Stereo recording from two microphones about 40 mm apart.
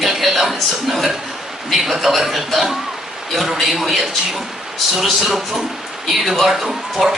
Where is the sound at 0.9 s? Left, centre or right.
Centre.